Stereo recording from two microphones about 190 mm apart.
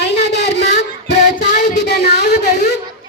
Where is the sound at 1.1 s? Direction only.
60° left (ahead or behind).